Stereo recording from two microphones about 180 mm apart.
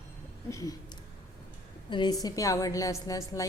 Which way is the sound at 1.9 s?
25° left (ahead or behind).